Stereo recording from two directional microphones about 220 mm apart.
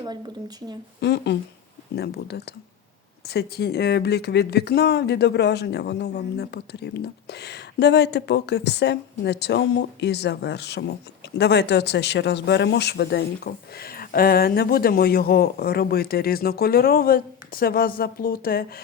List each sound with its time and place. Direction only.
0.0 s speech: 20° right (ahead or behind)
1.0 s speech: 50° left (ahead or behind)